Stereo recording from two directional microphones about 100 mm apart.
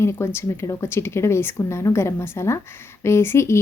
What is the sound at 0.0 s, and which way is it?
A woman's voice, 25° left (ahead or behind).